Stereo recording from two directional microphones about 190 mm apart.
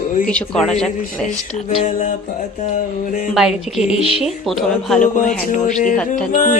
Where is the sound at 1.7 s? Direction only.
40° left (ahead or behind).